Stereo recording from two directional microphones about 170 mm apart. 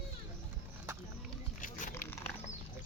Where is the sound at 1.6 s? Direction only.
50° left (ahead or behind).